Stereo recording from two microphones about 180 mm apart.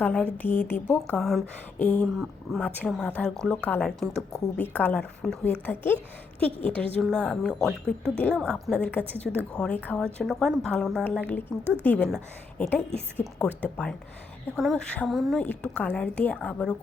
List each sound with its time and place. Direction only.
0.0 s a woman's voice: 5° left (ahead or behind)
6.6 s a woman's voice: 30° right (ahead or behind)
7.0 s a woman's voice: 5° left (ahead or behind)